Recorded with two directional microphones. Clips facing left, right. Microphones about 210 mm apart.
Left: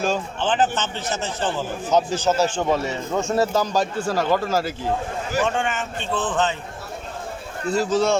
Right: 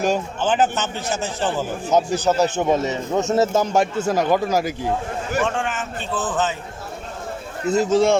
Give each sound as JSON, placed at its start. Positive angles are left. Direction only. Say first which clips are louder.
{"t": 0.0, "sound": "a man's voice", "louder": "right 2 dB", "side_deg": -10}
{"t": 5.4, "sound": "a man's voice", "louder": "left 1 dB", "side_deg": 0}
{"t": 7.7, "sound": "a man's voice", "louder": "right 3 dB", "side_deg": -25}